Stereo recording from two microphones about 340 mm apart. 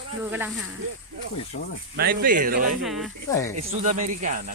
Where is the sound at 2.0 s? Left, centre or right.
Right.